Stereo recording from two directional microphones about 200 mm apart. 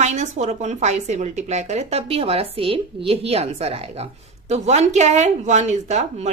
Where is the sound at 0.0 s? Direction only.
35° right (ahead or behind).